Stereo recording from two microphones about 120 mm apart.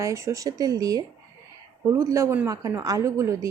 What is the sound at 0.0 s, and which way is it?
A woman's voice, 25° right (ahead or behind).